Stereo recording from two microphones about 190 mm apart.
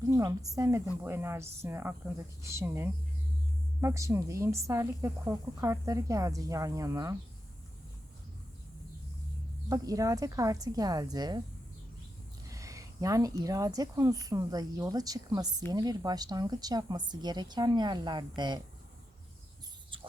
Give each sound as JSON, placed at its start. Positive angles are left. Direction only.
{"t": 0.1, "sound": "speech", "side_deg": -15}
{"t": 9.6, "sound": "speech", "side_deg": -20}
{"t": 12.5, "sound": "speech", "side_deg": -15}